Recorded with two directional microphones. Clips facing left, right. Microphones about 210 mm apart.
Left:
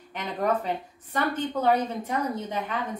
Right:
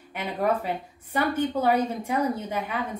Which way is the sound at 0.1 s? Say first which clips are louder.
Right 1 dB; 10° right (ahead or behind).